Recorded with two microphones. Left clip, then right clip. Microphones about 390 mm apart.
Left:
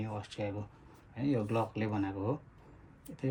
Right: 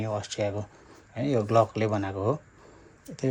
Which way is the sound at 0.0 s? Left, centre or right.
Centre.